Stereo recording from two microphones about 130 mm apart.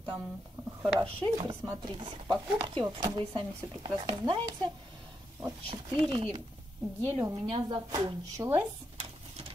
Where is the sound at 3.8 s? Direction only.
35° right (ahead or behind).